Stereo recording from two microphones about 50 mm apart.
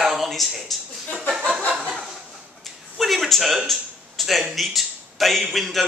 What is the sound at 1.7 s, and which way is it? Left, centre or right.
Snicker, centre.